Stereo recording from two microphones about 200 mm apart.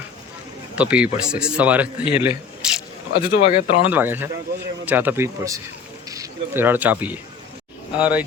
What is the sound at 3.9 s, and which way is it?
Speech, 10° right (ahead or behind).